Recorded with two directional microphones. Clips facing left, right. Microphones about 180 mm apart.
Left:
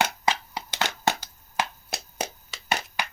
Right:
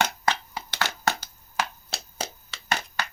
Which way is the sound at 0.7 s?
20° left (ahead or behind).